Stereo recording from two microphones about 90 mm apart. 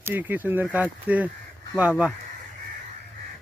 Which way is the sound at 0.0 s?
20° right (ahead or behind).